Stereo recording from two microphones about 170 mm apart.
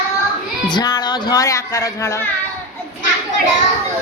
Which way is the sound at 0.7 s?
25° left (ahead or behind).